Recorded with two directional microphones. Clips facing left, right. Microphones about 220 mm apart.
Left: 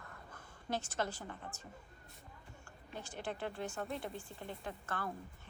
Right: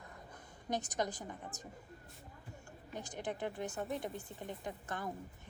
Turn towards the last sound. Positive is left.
turn(degrees=-15)  # may be behind; listen again after turning